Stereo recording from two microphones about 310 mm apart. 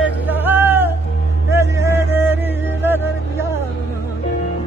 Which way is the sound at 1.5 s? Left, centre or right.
Centre.